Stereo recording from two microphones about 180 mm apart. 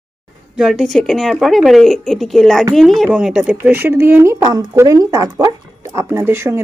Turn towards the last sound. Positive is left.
turn(degrees=-15)  # may be behind; listen again after turning